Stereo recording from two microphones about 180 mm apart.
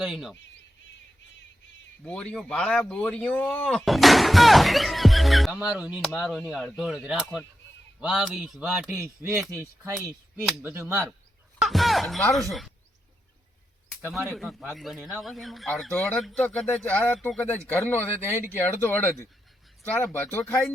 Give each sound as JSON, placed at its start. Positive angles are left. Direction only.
{"t": 0.0, "sound": "speech", "side_deg": 0}
{"t": 2.0, "sound": "speech", "side_deg": 5}
{"t": 9.0, "sound": "speech", "side_deg": -15}
{"t": 10.6, "sound": "speech", "side_deg": -10}
{"t": 11.6, "sound": "speech", "side_deg": 0}
{"t": 14.3, "sound": "speech", "side_deg": 0}